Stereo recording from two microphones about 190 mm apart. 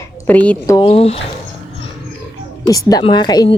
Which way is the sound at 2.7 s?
20° left (ahead or behind).